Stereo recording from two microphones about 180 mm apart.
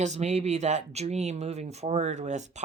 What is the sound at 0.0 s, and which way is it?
Speech, 40° right (ahead or behind).